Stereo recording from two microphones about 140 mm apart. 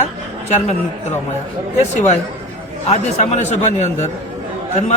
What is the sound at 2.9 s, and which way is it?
A man's voice, 55° left (ahead or behind).